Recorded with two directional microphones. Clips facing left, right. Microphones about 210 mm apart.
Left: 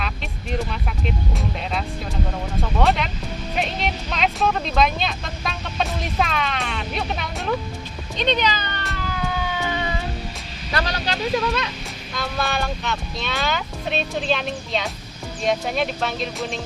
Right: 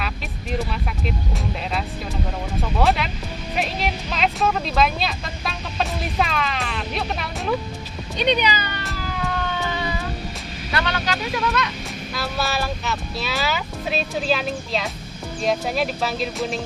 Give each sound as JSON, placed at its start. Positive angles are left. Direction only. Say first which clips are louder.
{"t": 2.7, "sound": "speech", "louder": "even", "side_deg": -5}
{"t": 8.2, "sound": "cat", "louder": "right 1 dB", "side_deg": -10}
{"t": 10.7, "sound": "a sound", "louder": "even", "side_deg": 35}
{"t": 12.1, "sound": "speech", "louder": "even", "side_deg": -5}